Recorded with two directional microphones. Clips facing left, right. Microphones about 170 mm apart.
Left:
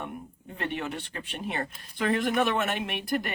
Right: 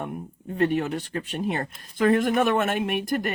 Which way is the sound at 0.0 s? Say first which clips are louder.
Right 5 dB; 45° right (ahead or behind).